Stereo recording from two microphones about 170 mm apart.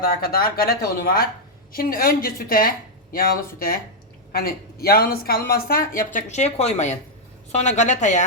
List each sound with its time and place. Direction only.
0.0 s a woman's voice: 60° left (ahead or behind); by 8.2 s 45° left (ahead or behind)